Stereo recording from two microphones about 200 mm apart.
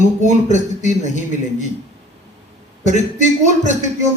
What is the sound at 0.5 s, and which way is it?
Speech, 35° left (ahead or behind).